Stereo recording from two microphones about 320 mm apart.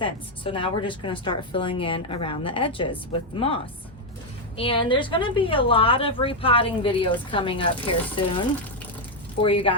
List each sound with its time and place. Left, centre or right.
0.0 s a woman's voice: centre
9.4 s a woman's voice: centre